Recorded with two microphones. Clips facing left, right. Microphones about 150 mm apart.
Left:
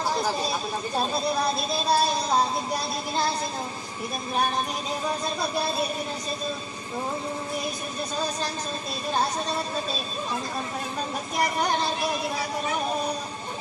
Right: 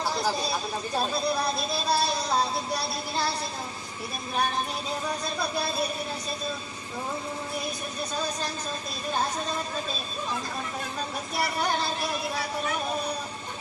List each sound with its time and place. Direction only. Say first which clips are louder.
1.5 s child singing: left 3 dB; 45° left (ahead or behind)
11.3 s child singing: left 3 dB; 40° left (ahead or behind)